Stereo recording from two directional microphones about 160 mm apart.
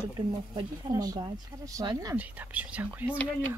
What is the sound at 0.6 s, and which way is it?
Speech, 25° right (ahead or behind).